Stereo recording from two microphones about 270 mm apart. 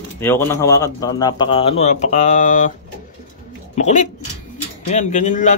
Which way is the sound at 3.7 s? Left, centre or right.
Left.